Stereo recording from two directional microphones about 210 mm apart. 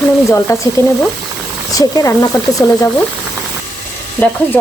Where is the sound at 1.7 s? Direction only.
15° left (ahead or behind).